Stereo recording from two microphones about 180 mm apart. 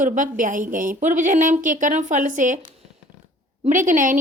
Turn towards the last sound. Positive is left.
turn(degrees=-45)  # may be behind; listen again after turning